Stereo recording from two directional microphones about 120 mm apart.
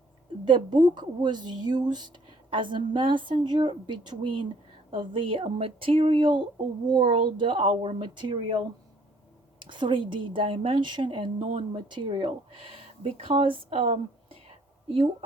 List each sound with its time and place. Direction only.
0.4 s a woman's voice: 40° right (ahead or behind); by 15.1 s 55° right (ahead or behind)